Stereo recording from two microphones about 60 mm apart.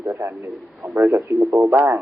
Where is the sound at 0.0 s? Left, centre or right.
Right.